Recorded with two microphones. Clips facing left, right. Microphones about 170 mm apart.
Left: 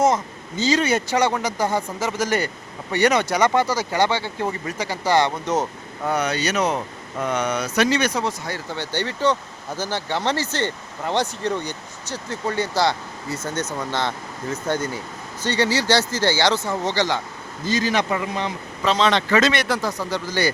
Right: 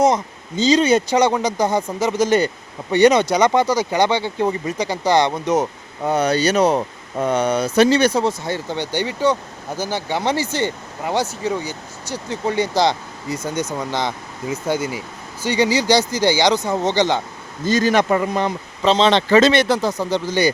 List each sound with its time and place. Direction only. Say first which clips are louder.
0.0 s speech: right 3 dB; 15° right (ahead or behind)
6.1 s speech: right 5 dB; 30° right (ahead or behind)
17.7 s speech: right 5 dB; 50° right (ahead or behind)
18.9 s speech: right 4 dB; 25° right (ahead or behind)